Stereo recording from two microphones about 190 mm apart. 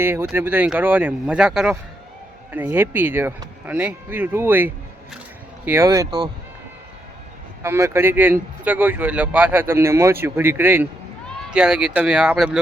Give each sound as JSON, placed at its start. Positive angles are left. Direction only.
{"t": 0.0, "sound": "speech", "side_deg": -10}
{"t": 7.6, "sound": "speech", "side_deg": -15}